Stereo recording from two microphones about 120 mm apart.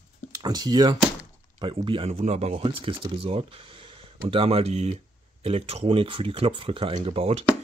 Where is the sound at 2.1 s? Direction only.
70° right (ahead or behind).